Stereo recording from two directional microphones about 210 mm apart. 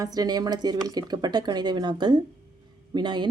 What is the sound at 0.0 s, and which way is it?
Speech, 20° right (ahead or behind).